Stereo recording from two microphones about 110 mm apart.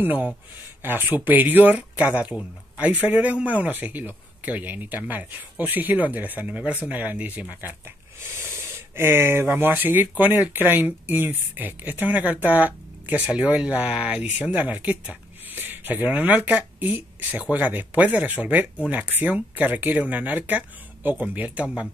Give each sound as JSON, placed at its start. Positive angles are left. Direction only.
{"t": 0.0, "sound": "speech", "side_deg": -15}